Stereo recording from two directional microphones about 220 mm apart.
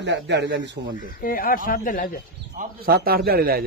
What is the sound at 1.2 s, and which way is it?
Speech, 40° left (ahead or behind).